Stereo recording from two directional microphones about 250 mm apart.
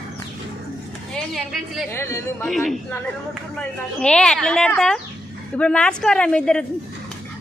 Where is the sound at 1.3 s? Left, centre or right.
Centre.